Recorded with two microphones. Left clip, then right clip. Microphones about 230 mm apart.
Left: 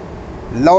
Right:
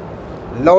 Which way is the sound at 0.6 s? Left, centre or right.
Left.